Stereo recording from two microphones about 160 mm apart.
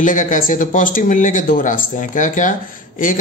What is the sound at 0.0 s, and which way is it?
A man's voice, 55° left (ahead or behind).